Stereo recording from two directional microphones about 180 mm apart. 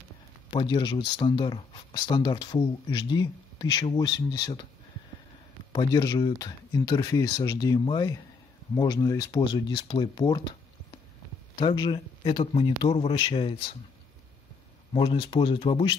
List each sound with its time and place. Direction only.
0.5 s speech: 25° left (ahead or behind)
5.7 s speech: 25° left (ahead or behind)
11.5 s speech: 25° left (ahead or behind)
14.9 s speech: 30° left (ahead or behind)